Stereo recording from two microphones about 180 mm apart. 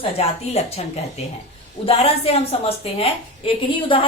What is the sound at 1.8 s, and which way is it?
A woman's voice, 35° left (ahead or behind).